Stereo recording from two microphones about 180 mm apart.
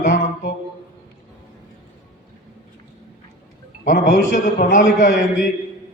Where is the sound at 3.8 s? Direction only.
55° left (ahead or behind).